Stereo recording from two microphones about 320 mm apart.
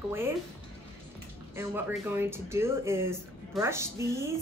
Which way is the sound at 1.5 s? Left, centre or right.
Centre.